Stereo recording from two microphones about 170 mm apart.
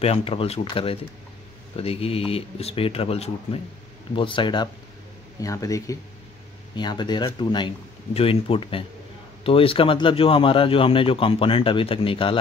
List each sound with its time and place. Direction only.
0.0 s speech: 35° left (ahead or behind)